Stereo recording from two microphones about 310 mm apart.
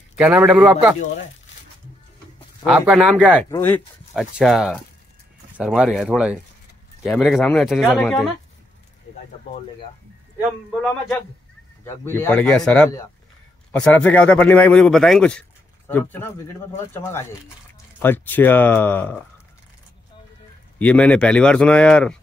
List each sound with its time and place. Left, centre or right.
0.2 s a man's voice: centre
2.6 s a man's voice: centre
10.7 s a man's voice: centre
20.8 s a man's voice: centre